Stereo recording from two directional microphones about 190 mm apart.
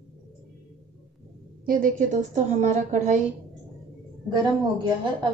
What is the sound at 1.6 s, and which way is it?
A woman's voice, 45° right (ahead or behind).